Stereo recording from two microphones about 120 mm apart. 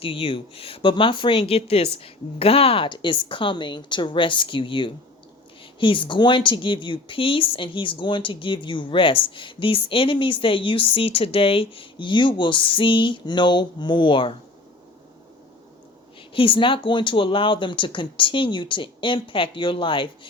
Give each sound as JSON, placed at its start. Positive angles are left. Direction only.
{"t": 0.0, "sound": "speech", "side_deg": 50}
{"t": 16.3, "sound": "speech", "side_deg": 45}